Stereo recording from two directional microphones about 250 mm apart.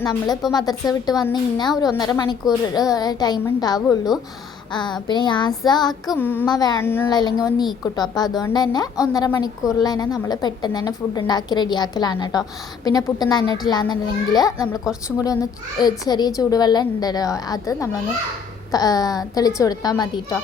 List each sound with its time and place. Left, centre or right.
0.0 s a woman's voice: centre
3.8 s speech: centre
4.7 s a woman's voice: centre
15.8 s a woman's voice: centre